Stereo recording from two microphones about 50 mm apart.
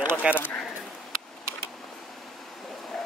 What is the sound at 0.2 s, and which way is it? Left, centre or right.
Speech, right.